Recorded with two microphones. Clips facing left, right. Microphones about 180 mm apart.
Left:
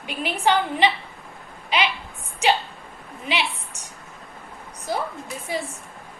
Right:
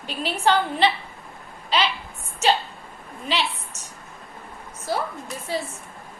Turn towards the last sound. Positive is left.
turn(degrees=15)  # may be behind; listen again after turning